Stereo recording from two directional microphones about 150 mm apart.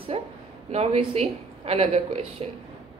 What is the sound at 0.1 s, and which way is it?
A woman's voice, 45° right (ahead or behind).